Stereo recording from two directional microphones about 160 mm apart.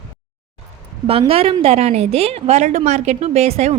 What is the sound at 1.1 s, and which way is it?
A woman's voice, 35° right (ahead or behind).